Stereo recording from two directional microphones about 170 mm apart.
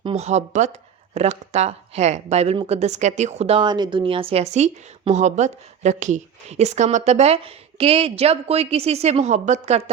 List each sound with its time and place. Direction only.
0.0 s speech: 35° right (ahead or behind)